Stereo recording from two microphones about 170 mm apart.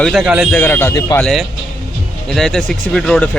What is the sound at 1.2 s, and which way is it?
Speech, centre (ahead or behind).